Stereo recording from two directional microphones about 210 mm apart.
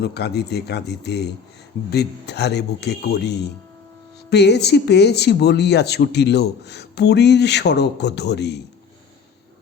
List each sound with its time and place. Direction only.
0.0 s speech: 50° left (ahead or behind)